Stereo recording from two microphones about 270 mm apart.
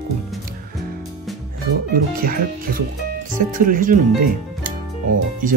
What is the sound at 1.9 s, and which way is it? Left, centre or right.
Speech, right.